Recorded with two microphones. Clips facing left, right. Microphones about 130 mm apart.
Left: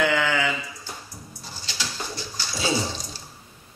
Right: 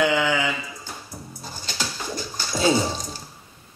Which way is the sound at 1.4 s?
45° right (ahead or behind).